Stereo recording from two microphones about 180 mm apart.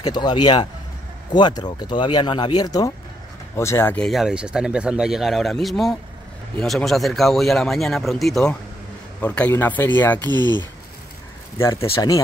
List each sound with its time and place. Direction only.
0.0 s speech: 25° left (ahead or behind)
10.3 s speech: 25° right (ahead or behind)
11.5 s speech: 15° left (ahead or behind)